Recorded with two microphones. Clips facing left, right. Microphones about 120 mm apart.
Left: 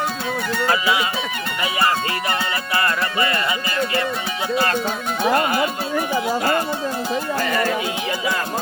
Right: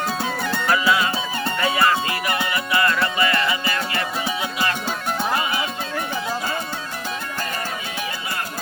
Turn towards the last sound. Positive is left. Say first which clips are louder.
# left 7 dB
turn(degrees=90)